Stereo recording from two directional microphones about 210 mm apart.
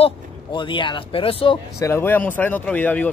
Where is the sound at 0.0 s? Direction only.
20° left (ahead or behind).